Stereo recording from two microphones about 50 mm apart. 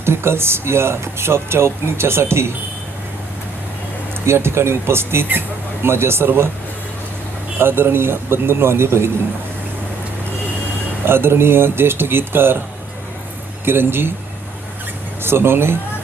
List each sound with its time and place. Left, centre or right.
0.0 s speech: right
4.3 s speech: right
7.6 s speech: right
11.0 s speech: right
13.7 s speech: right
15.2 s speech: right